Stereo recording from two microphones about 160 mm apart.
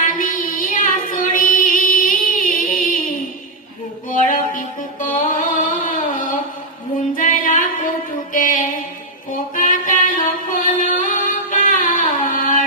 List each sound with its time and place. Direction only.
0.0 s music: 60° left (ahead or behind)
4.2 s music: 55° left (ahead or behind)
7.2 s music: 60° left (ahead or behind)
8.3 s mantra: 60° left (ahead or behind)
9.3 s music: 60° left (ahead or behind)